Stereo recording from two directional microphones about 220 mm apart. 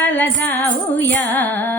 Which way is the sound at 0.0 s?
10° left (ahead or behind).